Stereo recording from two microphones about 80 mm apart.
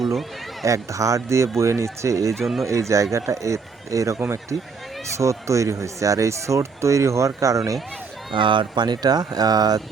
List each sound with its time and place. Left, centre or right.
0.0 s speech: centre
0.6 s speech: right
2.4 s speech: centre
2.6 s speech: right
8.3 s speech: right